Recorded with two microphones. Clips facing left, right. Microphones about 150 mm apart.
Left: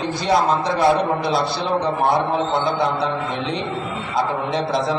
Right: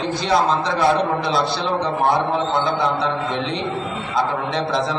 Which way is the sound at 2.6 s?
Centre (ahead or behind).